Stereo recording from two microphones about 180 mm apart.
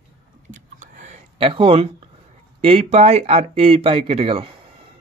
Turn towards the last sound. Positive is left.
turn(degrees=-30)  # may be behind; listen again after turning